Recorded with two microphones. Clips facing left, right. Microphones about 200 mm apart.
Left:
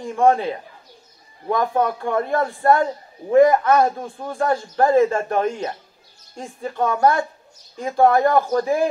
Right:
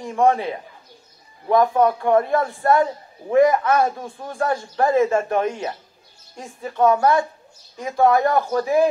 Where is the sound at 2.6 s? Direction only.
45° left (ahead or behind).